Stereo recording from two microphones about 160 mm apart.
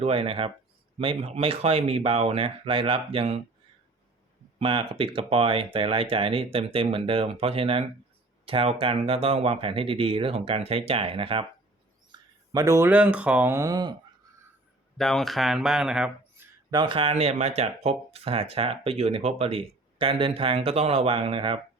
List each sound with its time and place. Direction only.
0.0 s speech: 35° right (ahead or behind)
4.6 s speech: 35° right (ahead or behind)
12.5 s speech: 20° right (ahead or behind)
14.9 s speech: centre (ahead or behind)
16.7 s speech: 30° right (ahead or behind)